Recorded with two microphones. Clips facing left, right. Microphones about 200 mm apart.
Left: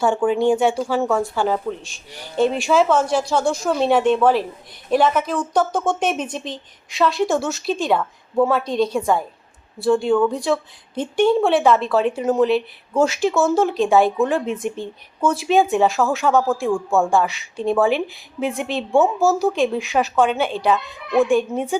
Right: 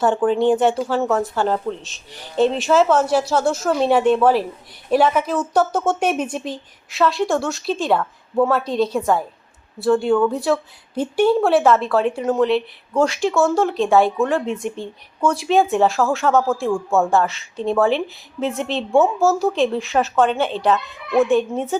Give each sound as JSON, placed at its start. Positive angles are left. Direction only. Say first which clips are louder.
{"t": 0.3, "sound": "a woman's voice", "louder": "right 1 dB", "side_deg": 10}
{"t": 0.8, "sound": "a woman's voice", "louder": "even", "side_deg": 0}
{"t": 2.7, "sound": "a woman's voice", "louder": "right 1 dB", "side_deg": -5}
{"t": 14.2, "sound": "a woman's voice", "louder": "even", "side_deg": 15}
{"t": 14.4, "sound": "a woman's voice", "louder": "even", "side_deg": 0}
{"t": 17.2, "sound": "a woman's voice", "louder": "left 1 dB", "side_deg": 15}
{"t": 18.9, "sound": "a woman's voice", "louder": "right 1 dB", "side_deg": 0}
{"t": 19.5, "sound": "a woman's voice", "louder": "right 1 dB", "side_deg": 10}
{"t": 20.7, "sound": "a woman's voice", "louder": "even", "side_deg": 0}